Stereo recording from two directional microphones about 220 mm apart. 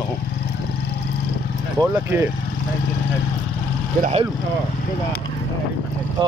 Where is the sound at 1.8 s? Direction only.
5° left (ahead or behind).